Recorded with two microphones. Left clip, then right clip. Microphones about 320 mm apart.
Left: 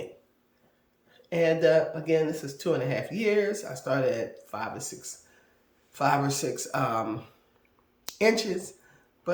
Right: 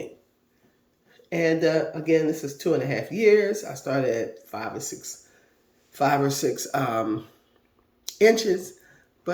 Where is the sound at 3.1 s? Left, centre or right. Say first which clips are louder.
Right 8 dB; left.